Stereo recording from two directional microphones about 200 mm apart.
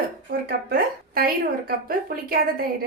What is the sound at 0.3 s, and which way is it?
A woman's voice, 50° right (ahead or behind).